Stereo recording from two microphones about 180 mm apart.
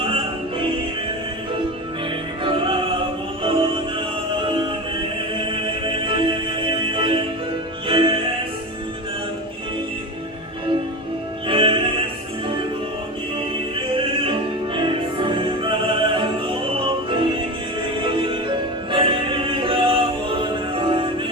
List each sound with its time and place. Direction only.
2.4 s opera: 30° right (ahead or behind)
3.4 s music: 30° right (ahead or behind)
11.4 s music: 30° right (ahead or behind)
14.2 s music: 30° right (ahead or behind)